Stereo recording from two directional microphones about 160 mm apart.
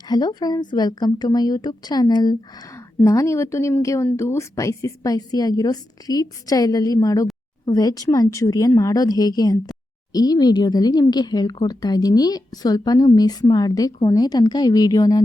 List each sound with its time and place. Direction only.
0.1 s a woman's voice: 25° left (ahead or behind)